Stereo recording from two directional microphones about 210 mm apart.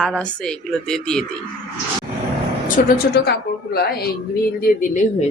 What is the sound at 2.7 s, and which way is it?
A woman's voice, 45° left (ahead or behind).